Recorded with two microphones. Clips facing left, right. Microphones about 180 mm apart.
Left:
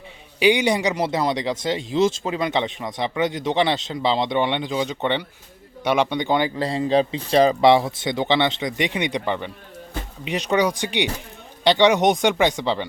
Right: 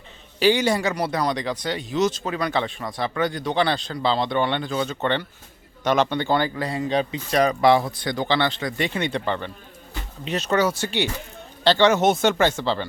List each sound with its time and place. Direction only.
0.3 s speech: 15° left (ahead or behind)
6.6 s speech: 30° left (ahead or behind)